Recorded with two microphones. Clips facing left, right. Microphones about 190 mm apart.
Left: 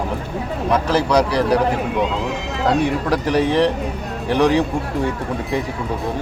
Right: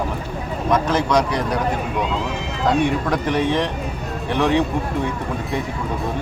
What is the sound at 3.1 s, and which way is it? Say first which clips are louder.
A man's voice: left 2 dB; 35° left (ahead or behind).